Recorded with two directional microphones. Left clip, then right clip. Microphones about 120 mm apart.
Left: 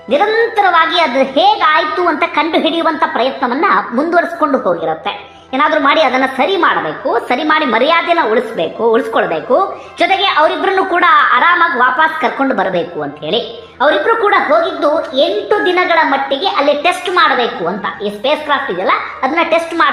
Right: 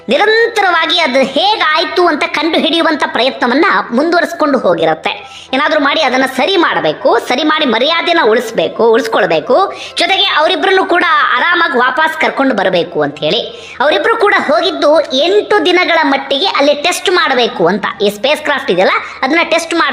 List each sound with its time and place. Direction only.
0.1 s a woman's voice: 25° right (ahead or behind)
5.5 s a woman's voice: 20° right (ahead or behind)